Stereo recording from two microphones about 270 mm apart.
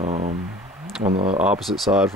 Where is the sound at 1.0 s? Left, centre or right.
Right.